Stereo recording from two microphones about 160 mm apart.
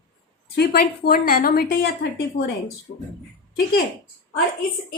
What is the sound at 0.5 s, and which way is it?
A woman's voice, 80° left.